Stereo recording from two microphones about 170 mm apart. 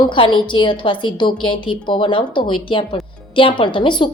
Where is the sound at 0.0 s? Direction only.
30° left (ahead or behind).